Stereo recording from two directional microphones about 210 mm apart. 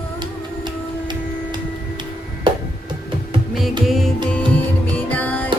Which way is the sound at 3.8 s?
Centre (ahead or behind).